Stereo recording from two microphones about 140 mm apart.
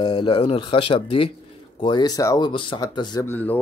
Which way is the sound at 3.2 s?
15° left (ahead or behind).